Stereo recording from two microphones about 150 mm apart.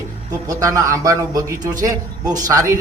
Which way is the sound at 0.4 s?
20° right (ahead or behind).